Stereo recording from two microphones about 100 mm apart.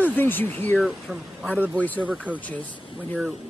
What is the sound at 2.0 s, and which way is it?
Speech, 15° right (ahead or behind).